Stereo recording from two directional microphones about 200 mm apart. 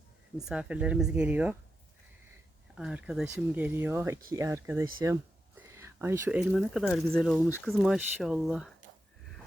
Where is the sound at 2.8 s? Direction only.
5° right (ahead or behind).